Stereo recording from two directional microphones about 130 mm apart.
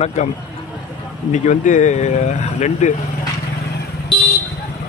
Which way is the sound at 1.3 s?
75° left (ahead or behind).